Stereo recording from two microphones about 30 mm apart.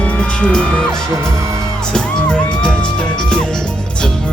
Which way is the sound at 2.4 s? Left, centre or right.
Left.